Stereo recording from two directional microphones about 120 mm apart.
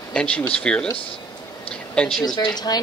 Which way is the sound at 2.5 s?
35° left (ahead or behind).